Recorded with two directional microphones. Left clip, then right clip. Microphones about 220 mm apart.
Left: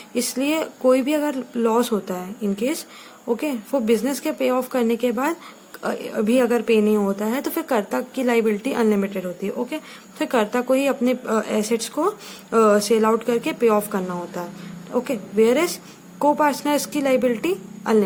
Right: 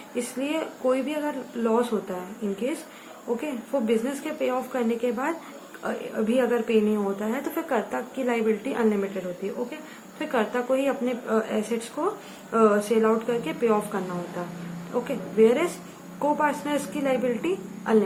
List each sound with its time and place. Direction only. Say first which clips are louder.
0.1 s a woman's voice: left 6 dB; 55° left (ahead or behind)
3.7 s a woman's voice: left 4 dB; 55° left (ahead or behind)
12.0 s a woman's voice: left 5 dB; 40° left (ahead or behind)
12.5 s a woman's voice: left 5 dB; 50° left (ahead or behind)